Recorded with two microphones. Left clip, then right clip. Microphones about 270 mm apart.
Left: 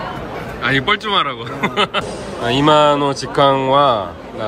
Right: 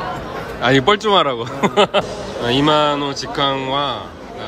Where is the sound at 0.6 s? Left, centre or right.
Centre.